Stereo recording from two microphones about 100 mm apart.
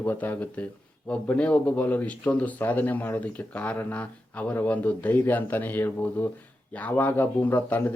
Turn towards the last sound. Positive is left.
turn(degrees=20)  # may be behind; listen again after turning